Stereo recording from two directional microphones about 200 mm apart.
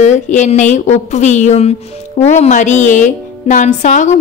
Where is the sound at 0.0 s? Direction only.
35° left (ahead or behind).